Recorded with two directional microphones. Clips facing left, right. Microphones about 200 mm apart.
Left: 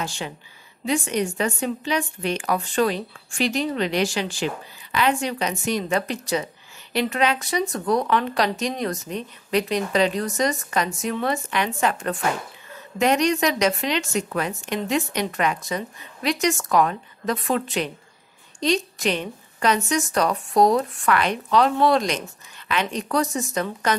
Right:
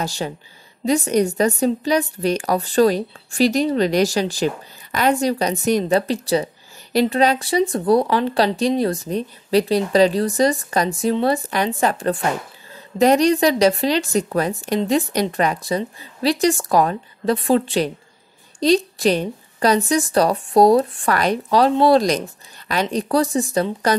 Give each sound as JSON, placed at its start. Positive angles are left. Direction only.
{"t": 0.0, "sound": "speech", "side_deg": -40}